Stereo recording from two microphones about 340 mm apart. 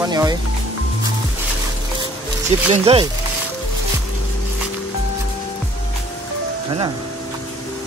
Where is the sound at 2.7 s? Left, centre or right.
Centre.